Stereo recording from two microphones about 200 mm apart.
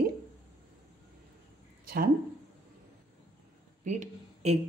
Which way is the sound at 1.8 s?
50° right (ahead or behind).